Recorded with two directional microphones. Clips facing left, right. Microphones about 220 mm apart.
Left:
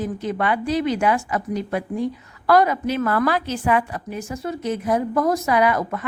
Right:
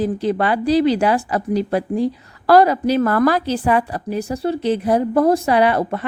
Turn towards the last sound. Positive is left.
turn(degrees=-30)  # may be behind; listen again after turning